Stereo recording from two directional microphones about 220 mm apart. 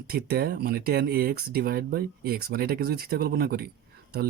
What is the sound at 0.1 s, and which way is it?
Speech, 45° right (ahead or behind).